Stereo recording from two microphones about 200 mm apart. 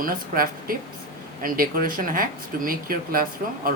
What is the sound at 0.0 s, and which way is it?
Speech, 45° right (ahead or behind).